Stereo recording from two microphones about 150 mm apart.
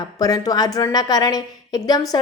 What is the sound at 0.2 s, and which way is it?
A woman's voice, 25° left (ahead or behind).